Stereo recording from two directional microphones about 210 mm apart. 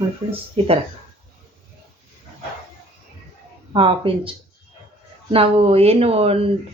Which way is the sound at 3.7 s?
25° right (ahead or behind).